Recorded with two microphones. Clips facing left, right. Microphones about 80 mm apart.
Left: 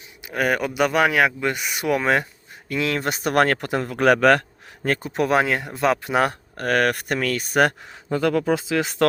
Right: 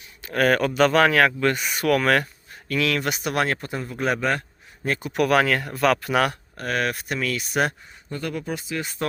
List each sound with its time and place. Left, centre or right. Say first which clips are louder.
0.3 s speech: right 2 dB; centre; by 3.3 s left
3.3 s a man's voice: left 8 dB; left
4.8 s speech: left 3 dB; left
5.1 s speech: right 1 dB; left
6.6 s speech: left 5 dB; left
8.7 s speech: left 6 dB; left